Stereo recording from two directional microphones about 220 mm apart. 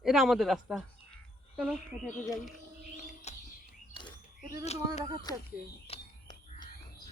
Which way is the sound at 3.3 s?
30° left (ahead or behind).